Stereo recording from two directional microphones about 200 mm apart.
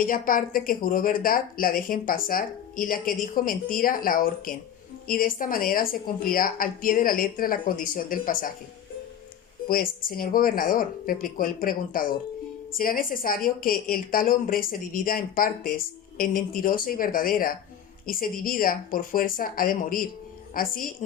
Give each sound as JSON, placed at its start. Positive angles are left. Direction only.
{"t": 0.0, "sound": "a woman's voice", "side_deg": 45}
{"t": 9.6, "sound": "a woman's voice", "side_deg": 45}